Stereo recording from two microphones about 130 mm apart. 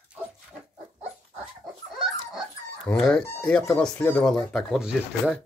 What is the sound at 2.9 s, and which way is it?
Speech, 5° left (ahead or behind).